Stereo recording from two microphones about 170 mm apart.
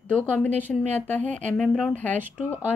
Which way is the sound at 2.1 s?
10° right (ahead or behind).